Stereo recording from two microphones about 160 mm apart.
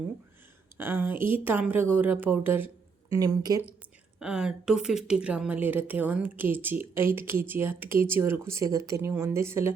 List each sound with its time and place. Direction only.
0.8 s speech: 15° right (ahead or behind)
3.1 s speech: 25° right (ahead or behind)
4.2 s speech: 5° right (ahead or behind)